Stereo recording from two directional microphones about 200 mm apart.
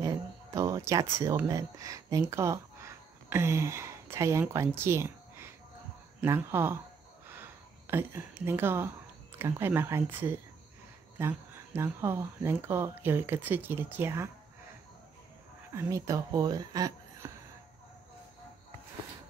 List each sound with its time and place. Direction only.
0.0 s speech: 15° right (ahead or behind)
7.2 s a sound: 10° right (ahead or behind)
9.4 s speech: 10° right (ahead or behind)
15.7 s speech: 15° right (ahead or behind)